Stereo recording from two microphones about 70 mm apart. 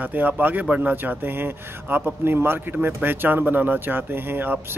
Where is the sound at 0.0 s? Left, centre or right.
Right.